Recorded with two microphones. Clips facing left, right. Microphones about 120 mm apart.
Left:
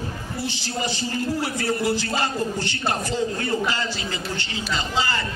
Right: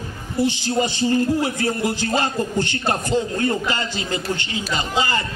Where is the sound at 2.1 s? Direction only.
50° right (ahead or behind).